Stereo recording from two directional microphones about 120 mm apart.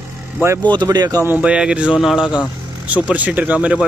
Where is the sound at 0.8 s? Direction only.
35° right (ahead or behind).